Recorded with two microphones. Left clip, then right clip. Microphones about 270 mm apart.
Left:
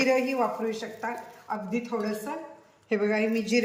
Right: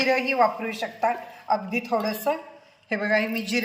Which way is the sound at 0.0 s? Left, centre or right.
Centre.